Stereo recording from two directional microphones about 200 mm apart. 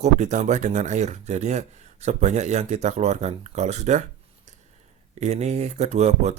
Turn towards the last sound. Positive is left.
turn(degrees=-35)  # may be behind; listen again after turning